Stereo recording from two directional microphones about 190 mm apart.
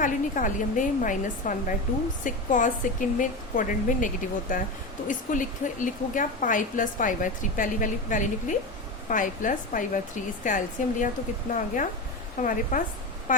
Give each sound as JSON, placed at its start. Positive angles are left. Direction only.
{"t": 0.0, "sound": "a woman's voice", "side_deg": 40}